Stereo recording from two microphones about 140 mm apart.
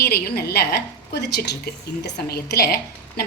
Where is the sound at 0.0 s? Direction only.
90° left.